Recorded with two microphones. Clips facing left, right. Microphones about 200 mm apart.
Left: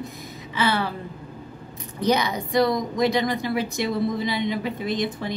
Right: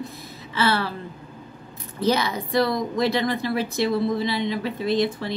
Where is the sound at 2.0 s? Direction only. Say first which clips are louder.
Even; 15° left (ahead or behind).